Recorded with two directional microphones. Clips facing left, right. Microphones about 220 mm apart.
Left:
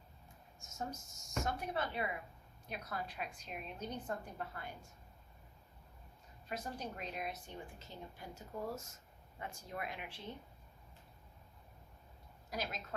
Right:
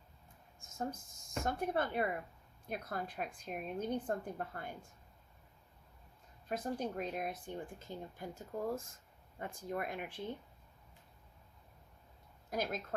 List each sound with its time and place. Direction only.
0.6 s speech: 55° right (ahead or behind)
6.5 s speech: 50° right (ahead or behind)
12.5 s a woman's voice: 55° right (ahead or behind)